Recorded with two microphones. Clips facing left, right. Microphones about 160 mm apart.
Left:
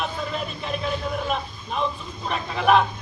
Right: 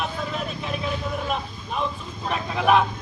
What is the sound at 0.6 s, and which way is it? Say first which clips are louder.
A man's voice: left 3 dB; 5° right (ahead or behind).